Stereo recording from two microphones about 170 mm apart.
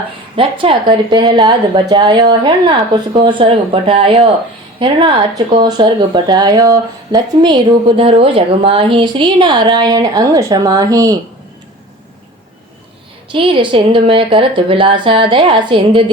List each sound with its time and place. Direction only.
0.3 s speech: 30° right (ahead or behind)
13.3 s speech: 30° right (ahead or behind)